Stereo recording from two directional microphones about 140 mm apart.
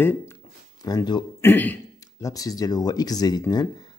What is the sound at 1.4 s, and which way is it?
Speech, 15° left (ahead or behind).